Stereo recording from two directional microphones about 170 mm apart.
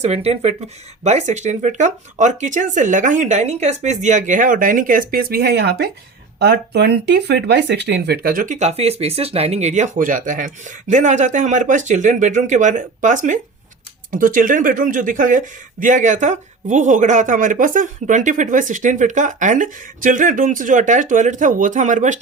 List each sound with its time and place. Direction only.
0.0 s speech: 35° right (ahead or behind)